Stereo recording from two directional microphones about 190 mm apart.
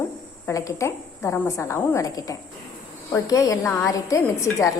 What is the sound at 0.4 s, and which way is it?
A woman's voice, 15° left (ahead or behind).